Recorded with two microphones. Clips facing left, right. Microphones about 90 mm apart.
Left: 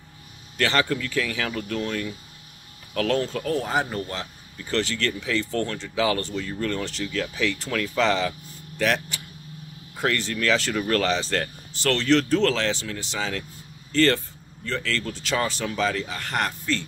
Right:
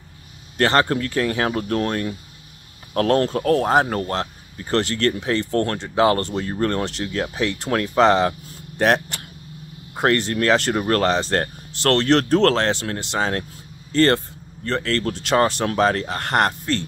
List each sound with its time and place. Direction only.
0.6 s speech: 45° right (ahead or behind)
7.7 s speech: 45° right (ahead or behind)
11.8 s speech: 60° right (ahead or behind)